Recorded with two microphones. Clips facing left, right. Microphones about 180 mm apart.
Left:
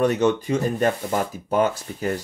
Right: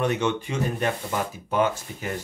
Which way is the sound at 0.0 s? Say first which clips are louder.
Left 5 dB; 40° left (ahead or behind).